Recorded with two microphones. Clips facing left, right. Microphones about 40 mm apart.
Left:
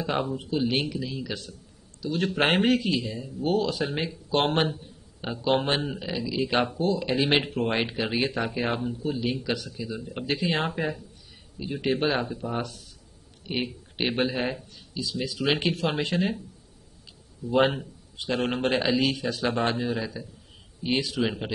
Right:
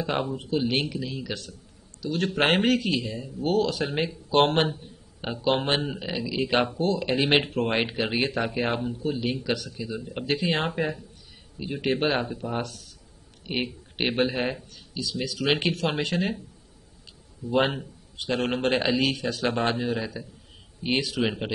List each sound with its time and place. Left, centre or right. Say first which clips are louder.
0.0 s a man's voice: even; centre
2.0 s a man's voice: even; centre
5.2 s speech: right 1 dB; centre
5.5 s speech: even; centre
7.4 s a man's voice: right 1 dB; centre
7.7 s a man's voice: right 1 dB; centre
12.6 s speech: even; centre
13.5 s a man's voice: right 1 dB; centre
15.9 s a man's voice: even; centre
17.5 s a man's voice: left 1 dB; centre